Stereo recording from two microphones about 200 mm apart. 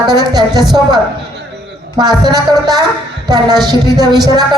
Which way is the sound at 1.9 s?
20° right (ahead or behind).